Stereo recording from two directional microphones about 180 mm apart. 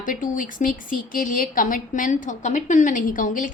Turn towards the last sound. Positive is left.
turn(degrees=45)  # may be behind; listen again after turning